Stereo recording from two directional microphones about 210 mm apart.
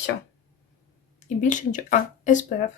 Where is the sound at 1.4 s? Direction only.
35° left (ahead or behind).